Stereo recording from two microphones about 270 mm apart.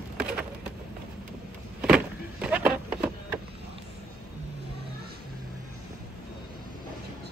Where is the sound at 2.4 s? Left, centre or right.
Centre.